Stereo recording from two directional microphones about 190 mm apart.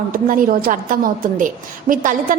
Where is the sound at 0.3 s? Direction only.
50° right (ahead or behind).